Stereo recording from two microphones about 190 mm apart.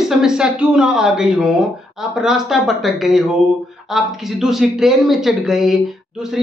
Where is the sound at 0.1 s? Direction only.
5° right (ahead or behind).